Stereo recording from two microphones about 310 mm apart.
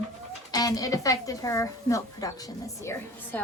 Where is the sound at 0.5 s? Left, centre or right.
Centre.